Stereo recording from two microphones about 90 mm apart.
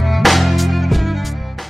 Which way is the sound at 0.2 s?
Centre (ahead or behind).